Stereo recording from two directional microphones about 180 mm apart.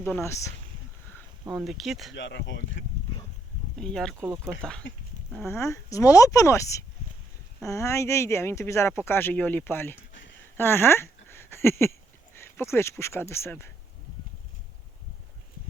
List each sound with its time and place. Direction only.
0.0 s speech: 15° left (ahead or behind)
1.6 s speech: centre (ahead or behind)
2.1 s speech: 90° left
3.8 s speech: 5° left (ahead or behind)
5.4 s speech: 15° left (ahead or behind)
10.1 s a sound: 90° left
10.6 s speech: 10° left (ahead or behind)